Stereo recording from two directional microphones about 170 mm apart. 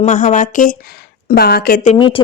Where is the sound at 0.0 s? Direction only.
45° left (ahead or behind).